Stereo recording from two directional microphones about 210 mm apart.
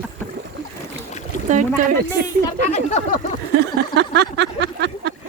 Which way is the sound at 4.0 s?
55° right (ahead or behind).